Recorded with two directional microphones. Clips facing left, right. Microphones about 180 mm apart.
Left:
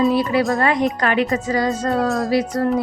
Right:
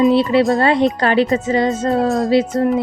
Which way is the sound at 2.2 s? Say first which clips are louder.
Right 4 dB; 20° right (ahead or behind).